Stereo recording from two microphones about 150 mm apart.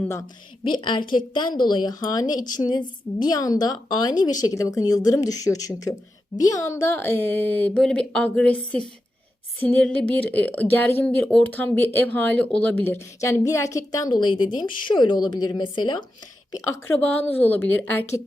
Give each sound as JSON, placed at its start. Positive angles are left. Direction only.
{"t": 0.0, "sound": "speech", "side_deg": 15}
{"t": 0.6, "sound": "a woman's voice", "side_deg": 30}
{"t": 16.6, "sound": "speech", "side_deg": 15}